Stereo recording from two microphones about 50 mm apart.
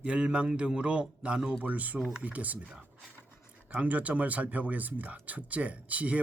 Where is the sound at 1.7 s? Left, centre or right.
Right.